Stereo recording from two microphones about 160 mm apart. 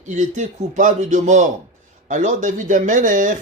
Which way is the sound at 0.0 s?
50° right (ahead or behind).